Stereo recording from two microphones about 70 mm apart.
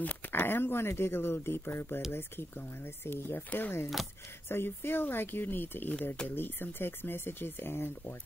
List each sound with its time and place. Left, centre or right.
0.0 s speech: left
3.1 s speech: left